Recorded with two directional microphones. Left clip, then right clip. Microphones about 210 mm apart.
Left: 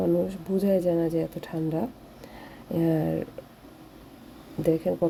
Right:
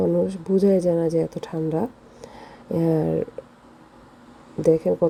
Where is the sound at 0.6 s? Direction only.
20° right (ahead or behind).